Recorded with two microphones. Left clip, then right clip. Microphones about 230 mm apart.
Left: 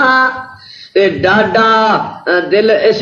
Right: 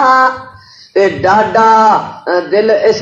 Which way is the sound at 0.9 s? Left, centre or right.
Left.